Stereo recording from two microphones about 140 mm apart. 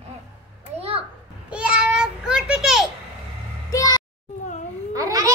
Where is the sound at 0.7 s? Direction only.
45° right (ahead or behind).